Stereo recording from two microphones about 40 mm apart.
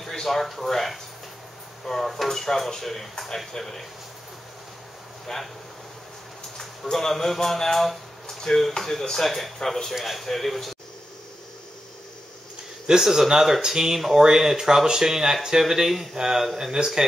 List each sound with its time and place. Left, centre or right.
0.1 s speech: centre
5.3 s speech: centre
6.6 s speech: centre
9.9 s speech: centre
12.8 s speech: centre